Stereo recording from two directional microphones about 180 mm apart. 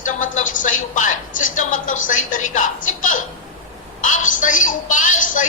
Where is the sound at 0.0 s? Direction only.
45° left (ahead or behind).